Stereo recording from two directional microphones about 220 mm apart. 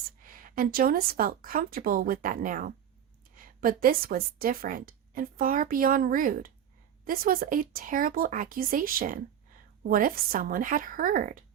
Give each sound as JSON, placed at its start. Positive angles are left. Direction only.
{"t": 0.2, "sound": "a woman's voice", "side_deg": -40}